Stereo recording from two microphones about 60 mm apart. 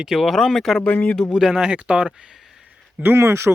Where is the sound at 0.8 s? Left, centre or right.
Left.